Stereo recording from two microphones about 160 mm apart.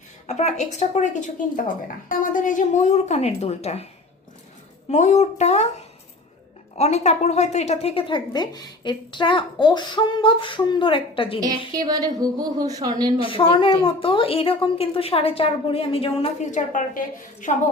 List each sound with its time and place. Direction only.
0.3 s speech: 45° left (ahead or behind)
4.9 s speech: 45° left (ahead or behind)
6.7 s a woman's voice: 40° left (ahead or behind)
11.7 s a woman's voice: 25° right (ahead or behind)
13.2 s a woman's voice: 35° left (ahead or behind)
16.5 s speech: 50° left (ahead or behind)